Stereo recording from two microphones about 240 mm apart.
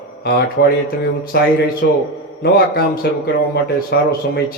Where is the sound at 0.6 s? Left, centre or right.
Left.